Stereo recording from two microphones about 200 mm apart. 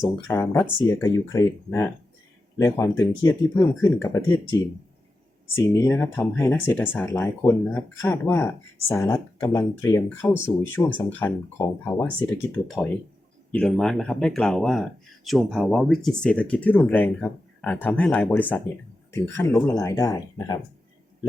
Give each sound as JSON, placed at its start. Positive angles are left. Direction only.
{"t": 0.0, "sound": "speech", "side_deg": 10}
{"t": 5.5, "sound": "speech", "side_deg": 15}
{"t": 12.6, "sound": "speech", "side_deg": 0}